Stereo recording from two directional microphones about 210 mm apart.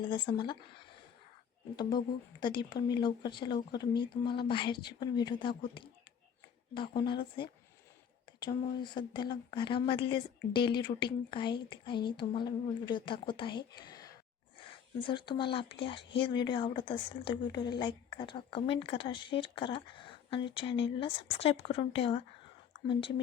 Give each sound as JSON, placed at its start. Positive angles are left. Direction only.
{"t": 0.0, "sound": "speech", "side_deg": 25}
{"t": 1.7, "sound": "speech", "side_deg": 20}